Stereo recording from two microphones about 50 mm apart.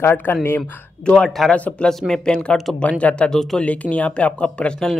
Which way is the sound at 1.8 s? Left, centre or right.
Centre.